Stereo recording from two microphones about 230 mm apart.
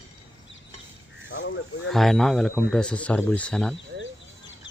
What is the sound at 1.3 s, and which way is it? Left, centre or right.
Speech, left.